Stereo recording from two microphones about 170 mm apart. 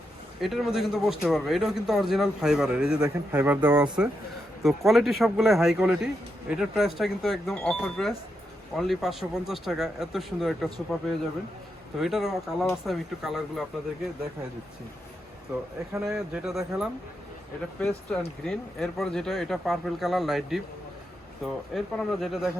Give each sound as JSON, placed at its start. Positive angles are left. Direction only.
{"t": 0.4, "sound": "speech", "side_deg": 0}
{"t": 4.6, "sound": "speech", "side_deg": 0}
{"t": 15.9, "sound": "speech", "side_deg": -5}
{"t": 17.7, "sound": "speech", "side_deg": 5}